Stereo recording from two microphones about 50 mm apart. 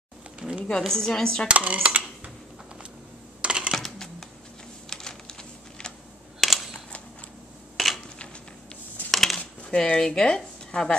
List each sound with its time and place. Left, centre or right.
0.4 s a sound: right
0.7 s speech: centre
1.5 s speech: right
3.3 s typing: right
3.7 s typing: centre
6.4 s camera: centre
7.7 s dishes: centre
9.1 s a sound: centre
9.4 s a sound: left
9.8 s speech: centre